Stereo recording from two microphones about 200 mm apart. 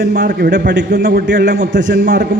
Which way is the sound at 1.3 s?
45° right (ahead or behind).